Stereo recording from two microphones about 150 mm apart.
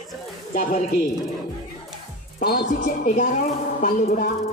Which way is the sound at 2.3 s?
80° left.